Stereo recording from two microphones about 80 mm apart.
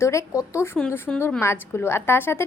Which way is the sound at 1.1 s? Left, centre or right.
Centre.